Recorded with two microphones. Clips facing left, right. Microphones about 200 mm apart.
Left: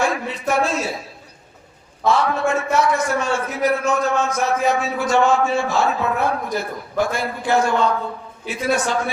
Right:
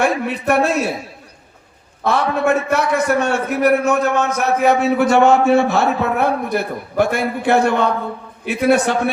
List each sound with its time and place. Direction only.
0.0 s a man's voice: 60° right (ahead or behind)
2.0 s a man's voice: 60° right (ahead or behind)